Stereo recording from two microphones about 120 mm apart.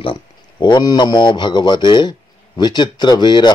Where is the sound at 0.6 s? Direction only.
35° left (ahead or behind).